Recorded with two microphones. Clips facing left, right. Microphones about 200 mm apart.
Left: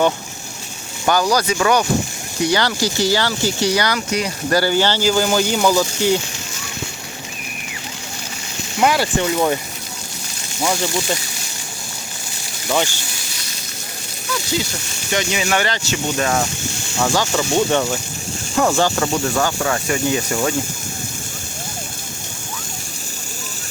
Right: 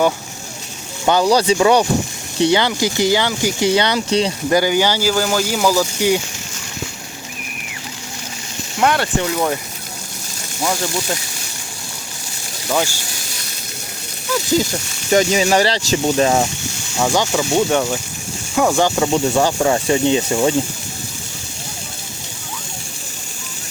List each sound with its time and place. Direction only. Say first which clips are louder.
1.0 s speech: right 3 dB; 25° right (ahead or behind)
4.4 s speech: left 1 dB; 15° right (ahead or behind)
8.8 s speech: even; 5° left (ahead or behind)
10.6 s speech: left 1 dB; centre (ahead or behind)
12.6 s speech: even; 5° right (ahead or behind)
15.1 s speech: right 6 dB; 40° right (ahead or behind); by 20.6 s 20° right (ahead or behind)